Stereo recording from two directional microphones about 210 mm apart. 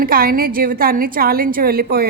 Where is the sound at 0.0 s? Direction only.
45° right (ahead or behind).